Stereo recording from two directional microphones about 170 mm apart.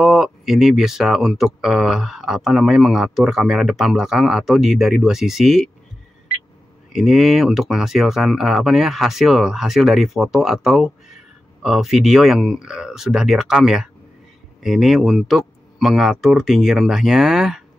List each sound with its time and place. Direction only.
0.0 s speech: centre (ahead or behind)
6.9 s speech: centre (ahead or behind)